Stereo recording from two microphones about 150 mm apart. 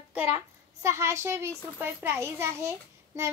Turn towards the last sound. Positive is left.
turn(degrees=-20)  # may be behind; listen again after turning